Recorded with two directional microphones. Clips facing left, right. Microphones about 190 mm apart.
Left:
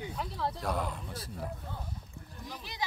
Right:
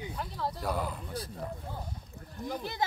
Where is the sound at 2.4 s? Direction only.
55° right (ahead or behind).